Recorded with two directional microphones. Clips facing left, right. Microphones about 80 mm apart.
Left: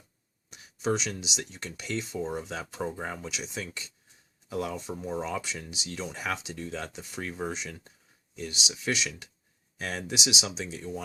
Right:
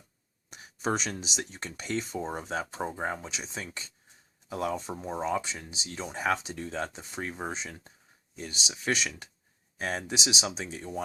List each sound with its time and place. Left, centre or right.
0.5 s a sound: right
1.2 s speech: right
5.0 s speech: right